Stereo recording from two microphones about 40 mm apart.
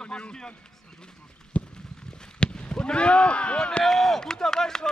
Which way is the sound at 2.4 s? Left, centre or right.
Left.